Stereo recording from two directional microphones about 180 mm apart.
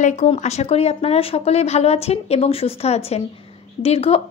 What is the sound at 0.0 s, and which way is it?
Speech, 40° left (ahead or behind).